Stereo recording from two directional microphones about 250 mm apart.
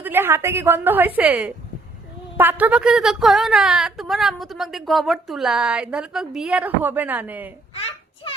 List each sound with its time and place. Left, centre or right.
0.0 s a woman's voice: centre